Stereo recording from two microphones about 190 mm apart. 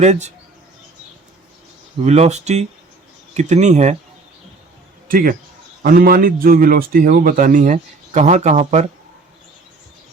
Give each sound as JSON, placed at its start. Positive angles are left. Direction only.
{"t": 0.0, "sound": "speech", "side_deg": -35}
{"t": 2.0, "sound": "speech", "side_deg": -35}
{"t": 5.0, "sound": "a man's voice", "side_deg": -45}